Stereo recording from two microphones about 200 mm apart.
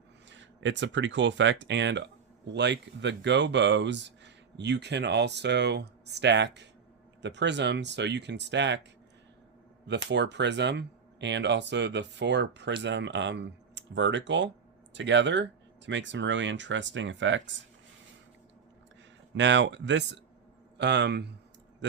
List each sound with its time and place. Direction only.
0.3 s speech: 65° right (ahead or behind)
9.8 s speech: 60° right (ahead or behind)
19.3 s speech: 65° right (ahead or behind)